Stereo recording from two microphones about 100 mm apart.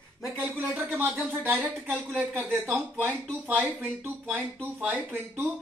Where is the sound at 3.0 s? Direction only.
20° right (ahead or behind).